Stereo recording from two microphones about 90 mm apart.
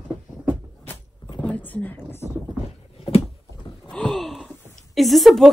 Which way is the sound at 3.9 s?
10° left (ahead or behind).